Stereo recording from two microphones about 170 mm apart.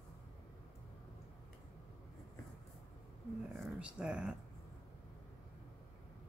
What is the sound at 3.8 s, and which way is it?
Speech, 5° right (ahead or behind).